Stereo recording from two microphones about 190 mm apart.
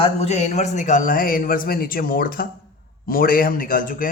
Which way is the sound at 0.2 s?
35° left (ahead or behind).